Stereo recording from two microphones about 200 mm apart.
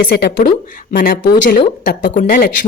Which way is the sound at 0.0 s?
50° left (ahead or behind).